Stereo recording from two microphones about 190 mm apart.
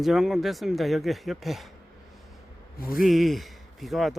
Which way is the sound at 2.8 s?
50° left (ahead or behind).